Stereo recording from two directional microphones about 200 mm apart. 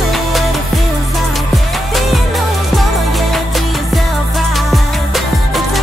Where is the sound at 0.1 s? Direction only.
Centre (ahead or behind).